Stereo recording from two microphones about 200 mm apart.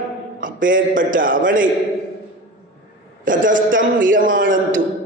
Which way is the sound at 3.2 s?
40° right (ahead or behind).